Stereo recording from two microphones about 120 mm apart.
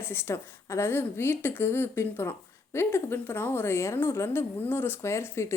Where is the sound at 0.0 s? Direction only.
20° left (ahead or behind).